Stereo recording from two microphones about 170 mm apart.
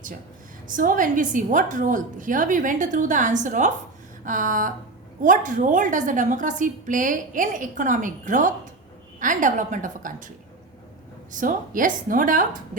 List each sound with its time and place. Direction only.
0.7 s a woman's voice: 50° right (ahead or behind)